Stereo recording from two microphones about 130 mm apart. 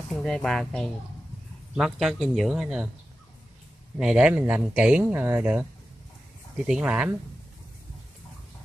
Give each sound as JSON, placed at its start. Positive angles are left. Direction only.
{"t": 0.1, "sound": "speech", "side_deg": 5}
{"t": 4.0, "sound": "speech", "side_deg": -5}